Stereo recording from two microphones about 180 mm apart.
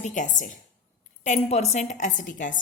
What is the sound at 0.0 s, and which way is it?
A woman's voice, 45° left (ahead or behind).